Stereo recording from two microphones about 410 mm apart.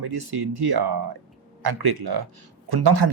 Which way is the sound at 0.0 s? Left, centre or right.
Right.